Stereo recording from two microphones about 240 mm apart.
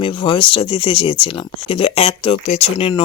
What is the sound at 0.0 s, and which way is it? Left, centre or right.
Speech, left.